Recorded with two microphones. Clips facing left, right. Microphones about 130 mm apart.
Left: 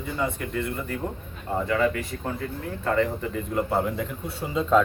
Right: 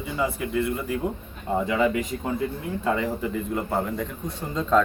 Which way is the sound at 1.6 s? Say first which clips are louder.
Even; 15° right (ahead or behind).